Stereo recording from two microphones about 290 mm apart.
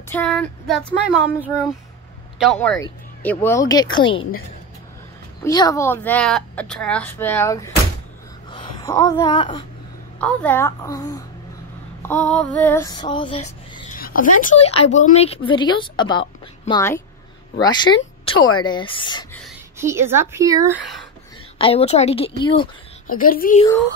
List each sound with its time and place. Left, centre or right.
0.1 s speech: centre
2.3 s a woman's voice: centre
5.4 s a woman's voice: centre
8.5 s a sound: centre
10.2 s a woman's voice: centre
13.9 s a woman's voice: left
19.8 s speech: centre
21.5 s speech: centre
23.0 s speech: left